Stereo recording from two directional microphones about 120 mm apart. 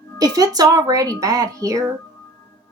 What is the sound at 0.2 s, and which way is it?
Speech, 30° right (ahead or behind).